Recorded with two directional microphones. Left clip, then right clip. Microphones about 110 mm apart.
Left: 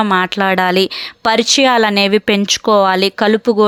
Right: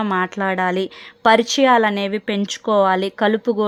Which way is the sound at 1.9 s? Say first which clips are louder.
Left 9 dB; 45° left (ahead or behind).